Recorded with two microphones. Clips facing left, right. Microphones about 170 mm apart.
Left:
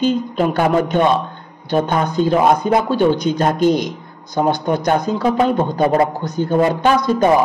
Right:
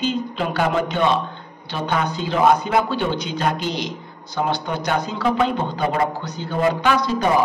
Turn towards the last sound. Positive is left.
turn(degrees=45)  # may be behind; listen again after turning